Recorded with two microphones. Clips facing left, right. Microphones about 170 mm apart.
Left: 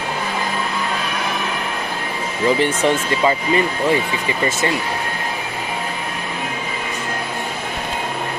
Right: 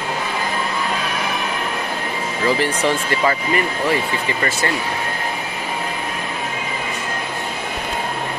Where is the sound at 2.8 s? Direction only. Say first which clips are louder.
Left 2 dB; 20° left (ahead or behind).